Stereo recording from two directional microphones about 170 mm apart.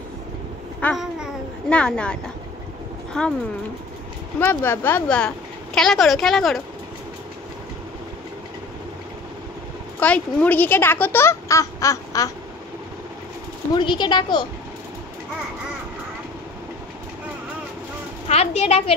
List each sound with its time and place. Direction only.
0.7 s babbling: centre (ahead or behind)
3.1 s speech: 5° left (ahead or behind)
4.4 s a woman's voice: 10° left (ahead or behind)
9.9 s speech: 10° left (ahead or behind)
13.7 s speech: 25° left (ahead or behind)
18.3 s a child's voice: 40° left (ahead or behind)